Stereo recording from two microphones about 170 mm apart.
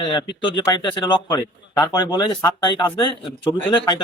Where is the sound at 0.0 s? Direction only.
25° left (ahead or behind).